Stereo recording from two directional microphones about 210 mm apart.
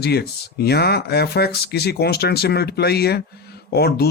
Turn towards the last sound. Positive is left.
turn(degrees=50)  # may be behind; listen again after turning